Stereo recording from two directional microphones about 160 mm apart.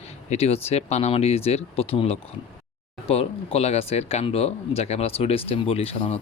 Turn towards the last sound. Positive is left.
turn(degrees=40)  # may be behind; listen again after turning